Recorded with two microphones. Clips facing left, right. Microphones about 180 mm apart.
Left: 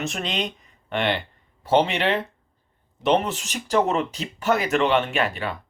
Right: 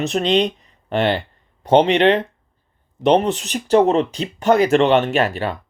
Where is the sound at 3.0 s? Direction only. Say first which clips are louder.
Right 6 dB; 35° right (ahead or behind).